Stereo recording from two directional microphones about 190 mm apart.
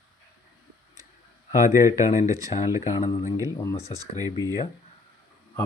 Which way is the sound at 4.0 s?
20° right (ahead or behind).